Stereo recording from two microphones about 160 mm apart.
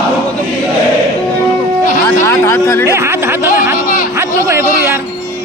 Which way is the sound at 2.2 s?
15° left (ahead or behind).